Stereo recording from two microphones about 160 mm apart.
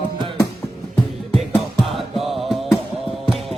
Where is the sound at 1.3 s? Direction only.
Centre (ahead or behind).